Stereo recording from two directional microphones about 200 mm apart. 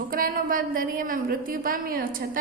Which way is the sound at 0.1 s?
45° right (ahead or behind).